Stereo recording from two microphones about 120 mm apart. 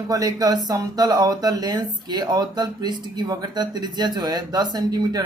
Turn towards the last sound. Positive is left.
turn(degrees=-35)  # may be behind; listen again after turning